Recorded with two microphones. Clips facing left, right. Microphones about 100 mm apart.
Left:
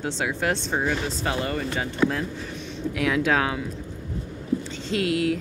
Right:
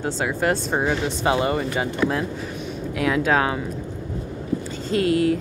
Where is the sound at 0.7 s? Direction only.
20° right (ahead or behind).